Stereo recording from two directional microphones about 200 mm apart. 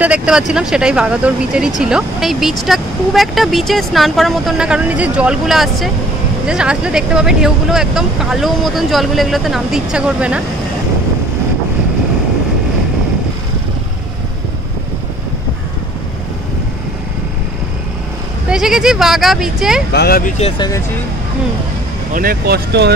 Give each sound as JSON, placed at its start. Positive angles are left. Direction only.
{"t": 0.0, "sound": "speech", "side_deg": -5}
{"t": 18.5, "sound": "speech", "side_deg": -5}
{"t": 19.9, "sound": "speech", "side_deg": 50}
{"t": 20.5, "sound": "speech", "side_deg": 20}
{"t": 22.1, "sound": "speech", "side_deg": -45}